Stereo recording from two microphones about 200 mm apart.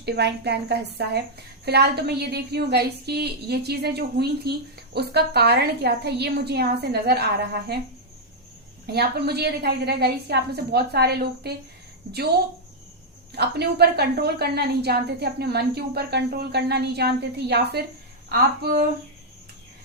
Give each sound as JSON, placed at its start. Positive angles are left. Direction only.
{"t": 0.0, "sound": "a woman's voice", "side_deg": -55}
{"t": 8.9, "sound": "a woman's voice", "side_deg": -55}
{"t": 13.3, "sound": "a woman's voice", "side_deg": -55}